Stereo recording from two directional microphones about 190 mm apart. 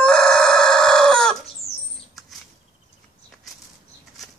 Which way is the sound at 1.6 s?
35° left (ahead or behind).